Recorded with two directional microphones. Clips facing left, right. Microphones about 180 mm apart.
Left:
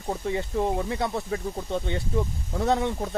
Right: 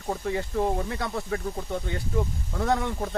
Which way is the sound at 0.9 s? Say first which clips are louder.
Left 2 dB; 25° left (ahead or behind).